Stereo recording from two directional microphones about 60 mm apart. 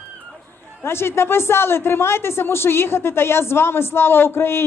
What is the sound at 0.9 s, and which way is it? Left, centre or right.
Speech, left.